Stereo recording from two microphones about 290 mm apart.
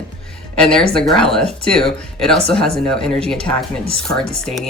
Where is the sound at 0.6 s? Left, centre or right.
Centre.